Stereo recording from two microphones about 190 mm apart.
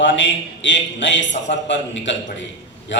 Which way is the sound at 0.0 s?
75° left (ahead or behind).